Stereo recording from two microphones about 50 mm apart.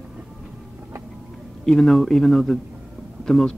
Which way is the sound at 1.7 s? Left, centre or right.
Centre.